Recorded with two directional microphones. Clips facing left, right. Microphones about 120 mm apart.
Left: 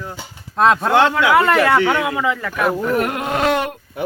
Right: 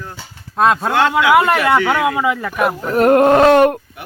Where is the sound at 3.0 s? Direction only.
40° right (ahead or behind).